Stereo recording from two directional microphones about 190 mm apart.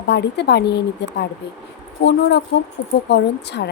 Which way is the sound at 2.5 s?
65° left (ahead or behind).